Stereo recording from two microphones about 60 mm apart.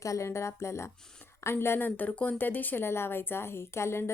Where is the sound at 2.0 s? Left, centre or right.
Left.